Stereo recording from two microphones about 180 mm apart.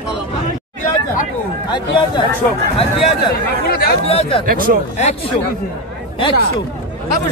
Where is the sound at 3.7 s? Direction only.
55° left (ahead or behind).